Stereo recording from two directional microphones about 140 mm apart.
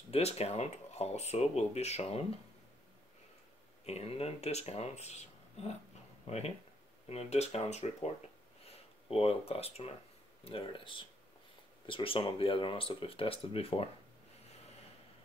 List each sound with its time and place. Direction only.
0.1 s speech: 50° left (ahead or behind)
3.8 s speech: 50° left (ahead or behind)
8.6 s a sound: 45° left (ahead or behind)
9.5 s speech: 45° left (ahead or behind)